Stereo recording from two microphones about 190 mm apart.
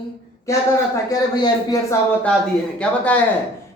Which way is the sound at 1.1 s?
20° left (ahead or behind).